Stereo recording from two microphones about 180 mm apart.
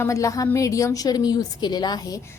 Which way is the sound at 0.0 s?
15° left (ahead or behind).